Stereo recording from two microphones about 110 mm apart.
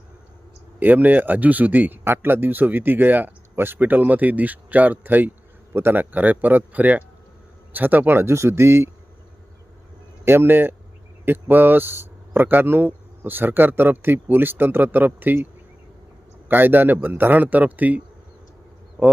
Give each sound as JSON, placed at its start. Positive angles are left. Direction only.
{"t": 0.8, "sound": "speech", "side_deg": -15}
{"t": 10.2, "sound": "speech", "side_deg": -20}
{"t": 16.5, "sound": "speech", "side_deg": -20}